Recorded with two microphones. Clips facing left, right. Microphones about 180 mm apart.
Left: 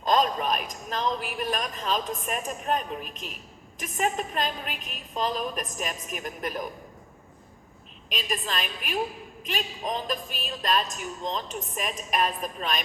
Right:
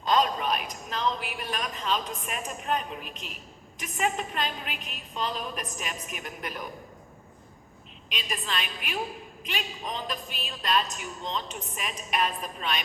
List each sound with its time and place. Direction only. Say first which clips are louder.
0.0 s a woman's voice: left 1 dB; 45° left (ahead or behind)
8.1 s a woman's voice: left 3 dB; 45° left (ahead or behind)